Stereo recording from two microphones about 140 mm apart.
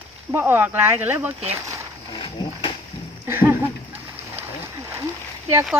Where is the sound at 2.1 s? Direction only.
35° left (ahead or behind).